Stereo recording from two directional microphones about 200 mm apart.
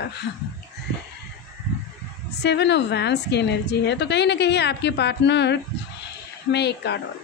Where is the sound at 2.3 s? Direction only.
55° left (ahead or behind).